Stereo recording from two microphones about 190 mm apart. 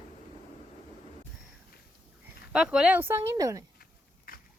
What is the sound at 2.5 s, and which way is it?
Speech, 5° right (ahead or behind).